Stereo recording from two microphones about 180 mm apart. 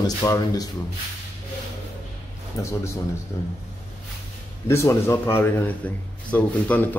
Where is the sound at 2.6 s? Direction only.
20° left (ahead or behind).